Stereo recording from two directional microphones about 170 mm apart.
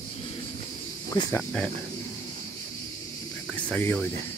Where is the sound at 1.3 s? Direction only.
5° left (ahead or behind).